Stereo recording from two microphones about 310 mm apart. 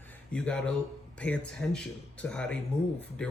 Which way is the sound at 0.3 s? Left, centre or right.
Centre.